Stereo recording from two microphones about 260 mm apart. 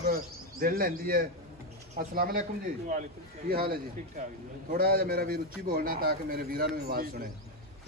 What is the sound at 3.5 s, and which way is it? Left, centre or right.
A man's voice, right.